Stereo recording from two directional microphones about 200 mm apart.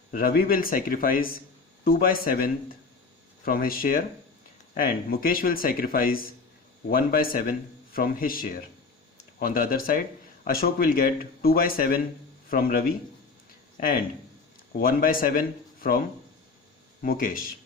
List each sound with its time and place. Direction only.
0.1 s speech: 45° left (ahead or behind)
17.0 s speech: 45° left (ahead or behind)